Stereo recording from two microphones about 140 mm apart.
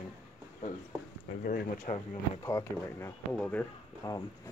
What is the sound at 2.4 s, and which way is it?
Speech, 20° left (ahead or behind).